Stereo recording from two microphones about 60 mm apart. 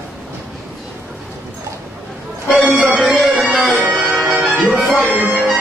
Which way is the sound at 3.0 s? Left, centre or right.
Centre.